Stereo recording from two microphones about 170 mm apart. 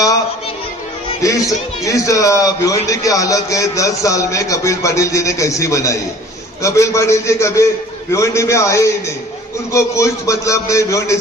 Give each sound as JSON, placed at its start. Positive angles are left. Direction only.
{"t": 1.2, "sound": "a man's voice", "side_deg": 20}